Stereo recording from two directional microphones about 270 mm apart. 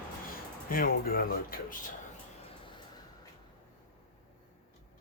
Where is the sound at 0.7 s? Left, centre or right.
Left.